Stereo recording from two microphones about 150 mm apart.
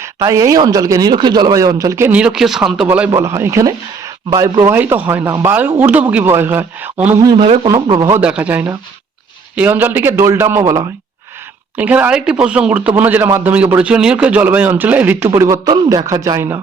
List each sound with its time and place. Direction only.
0.0 s speech: 20° right (ahead or behind)
3.1 s a man's voice: 20° right (ahead or behind)
7.3 s speech: 35° right (ahead or behind)
7.7 s speech: 25° right (ahead or behind)
8.2 s a man's voice: 10° right (ahead or behind)
11.8 s a man's voice: 10° right (ahead or behind)